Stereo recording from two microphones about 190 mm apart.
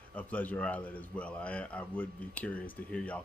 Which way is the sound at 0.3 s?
10° left (ahead or behind).